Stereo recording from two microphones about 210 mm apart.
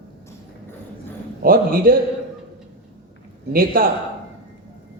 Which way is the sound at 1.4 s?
45° right (ahead or behind).